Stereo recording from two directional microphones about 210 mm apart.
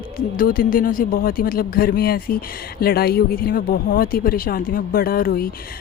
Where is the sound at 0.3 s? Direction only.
40° left (ahead or behind).